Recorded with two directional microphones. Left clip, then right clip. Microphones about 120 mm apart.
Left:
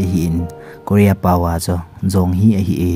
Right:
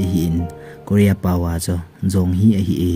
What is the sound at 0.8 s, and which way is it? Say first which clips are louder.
Speech: left 4 dB; 30° left (ahead or behind).